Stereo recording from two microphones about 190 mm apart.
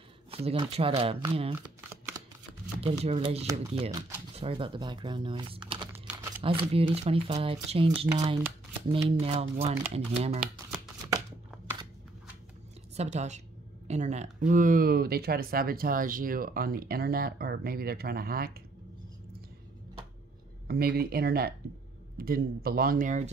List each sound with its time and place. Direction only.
0.3 s speech: 30° right (ahead or behind)
2.8 s speech: 30° right (ahead or behind)
12.9 s a woman's voice: 35° right (ahead or behind); by 18.6 s 50° right (ahead or behind)
20.6 s speech: 55° right (ahead or behind)